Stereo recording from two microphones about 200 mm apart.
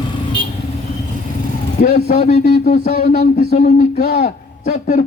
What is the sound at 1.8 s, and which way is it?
A man's voice, 40° left (ahead or behind).